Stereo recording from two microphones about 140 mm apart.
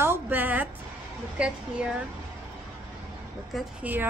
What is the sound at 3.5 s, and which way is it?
Speech, centre (ahead or behind).